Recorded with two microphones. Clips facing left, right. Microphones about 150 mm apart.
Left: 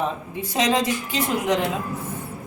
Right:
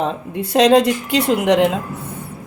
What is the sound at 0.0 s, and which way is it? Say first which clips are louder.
A woman's voice: right 5 dB; 70° right (ahead or behind).